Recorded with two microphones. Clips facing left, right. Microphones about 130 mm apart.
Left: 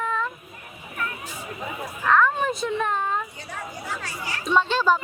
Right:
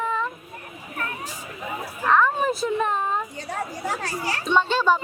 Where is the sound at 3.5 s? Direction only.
35° right (ahead or behind).